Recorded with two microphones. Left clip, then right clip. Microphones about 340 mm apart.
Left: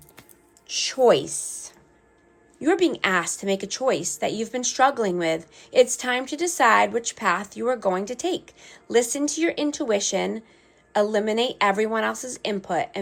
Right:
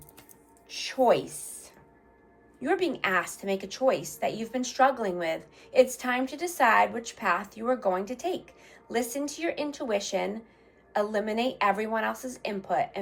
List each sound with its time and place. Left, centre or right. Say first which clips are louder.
0.7 s music: left 9 dB; left
1.0 s speech: left 5 dB; left